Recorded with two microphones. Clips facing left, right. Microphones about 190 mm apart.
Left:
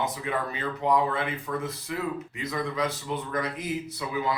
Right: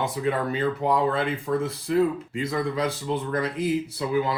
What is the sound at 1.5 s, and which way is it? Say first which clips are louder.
Speech: right 7 dB; 25° right (ahead or behind).